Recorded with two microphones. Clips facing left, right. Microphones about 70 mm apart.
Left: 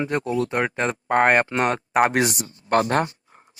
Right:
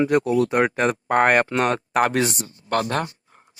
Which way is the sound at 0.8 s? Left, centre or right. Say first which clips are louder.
Right 1 dB; centre.